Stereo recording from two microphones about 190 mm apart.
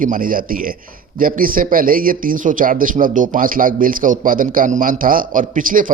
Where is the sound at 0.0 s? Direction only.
45° right (ahead or behind).